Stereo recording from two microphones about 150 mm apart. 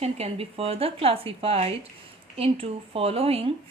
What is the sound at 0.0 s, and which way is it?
A woman's voice, 40° right (ahead or behind).